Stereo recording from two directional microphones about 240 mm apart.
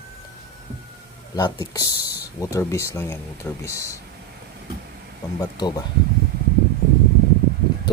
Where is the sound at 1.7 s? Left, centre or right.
Centre.